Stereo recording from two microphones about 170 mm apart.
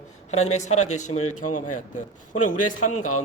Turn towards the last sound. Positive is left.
turn(degrees=50)  # may be behind; listen again after turning